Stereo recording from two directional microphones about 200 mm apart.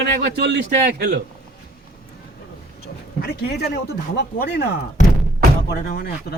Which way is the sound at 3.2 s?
55° left (ahead or behind).